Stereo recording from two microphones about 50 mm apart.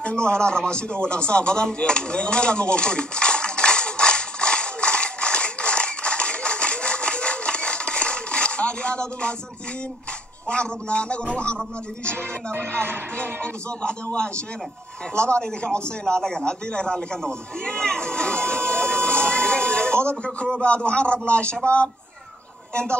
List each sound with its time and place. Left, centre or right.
0.0 s a sound: centre
10.5 s a man's voice: left
12.2 s speech: right
13.2 s a man's voice: left
16.2 s a sound: centre
20.1 s a man's voice: left